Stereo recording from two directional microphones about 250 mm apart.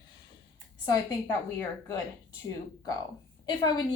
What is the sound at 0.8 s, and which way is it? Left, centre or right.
A woman's voice, centre.